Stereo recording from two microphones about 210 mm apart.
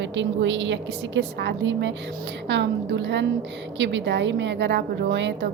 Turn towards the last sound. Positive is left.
turn(degrees=-55)  # may be behind; listen again after turning